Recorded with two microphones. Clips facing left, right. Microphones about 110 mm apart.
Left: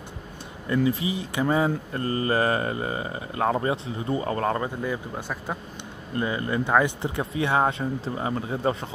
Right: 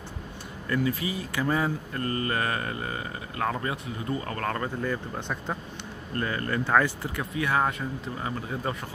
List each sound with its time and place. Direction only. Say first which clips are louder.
0.7 s speech: left 4 dB; 25° left (ahead or behind)